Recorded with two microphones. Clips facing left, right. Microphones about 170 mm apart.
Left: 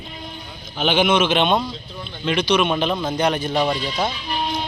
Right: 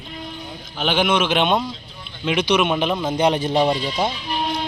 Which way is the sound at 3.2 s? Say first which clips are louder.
Right 3 dB; 25° right (ahead or behind).